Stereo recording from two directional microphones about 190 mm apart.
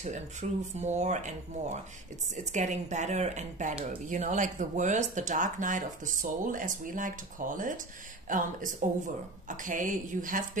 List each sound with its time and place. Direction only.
0.0 s speech: 40° right (ahead or behind)